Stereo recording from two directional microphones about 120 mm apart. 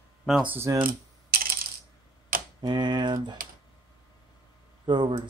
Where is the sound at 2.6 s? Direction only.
35° right (ahead or behind).